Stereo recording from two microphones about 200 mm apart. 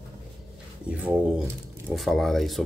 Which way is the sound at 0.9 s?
5° right (ahead or behind).